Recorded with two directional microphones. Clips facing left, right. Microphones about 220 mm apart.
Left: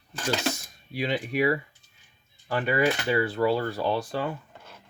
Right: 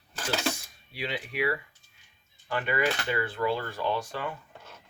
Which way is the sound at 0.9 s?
45° left (ahead or behind).